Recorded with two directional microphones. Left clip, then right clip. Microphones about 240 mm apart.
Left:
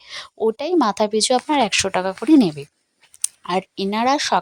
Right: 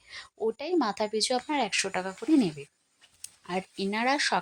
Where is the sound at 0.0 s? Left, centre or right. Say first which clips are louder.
Left 10 dB; left.